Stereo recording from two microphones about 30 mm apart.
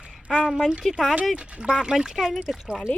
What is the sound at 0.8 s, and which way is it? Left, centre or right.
Speech, centre.